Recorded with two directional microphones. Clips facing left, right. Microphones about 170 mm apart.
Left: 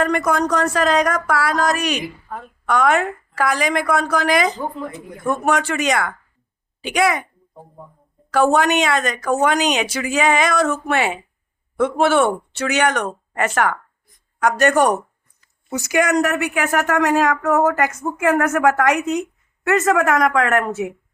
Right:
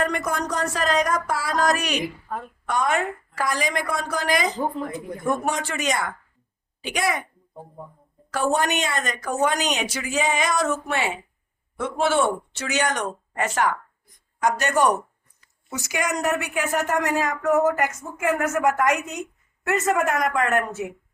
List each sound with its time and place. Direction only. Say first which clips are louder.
0.0 s a woman's voice: left 6 dB; 70° left (ahead or behind)
8.3 s a woman's voice: left 7 dB; 75° left (ahead or behind); by 14.8 s 55° left (ahead or behind)
15.9 s a woman's voice: left 7 dB; 65° left (ahead or behind); by 20.8 s 80° left